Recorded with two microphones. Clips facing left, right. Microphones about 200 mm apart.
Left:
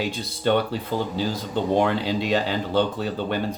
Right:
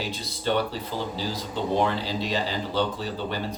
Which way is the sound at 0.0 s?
55° left (ahead or behind).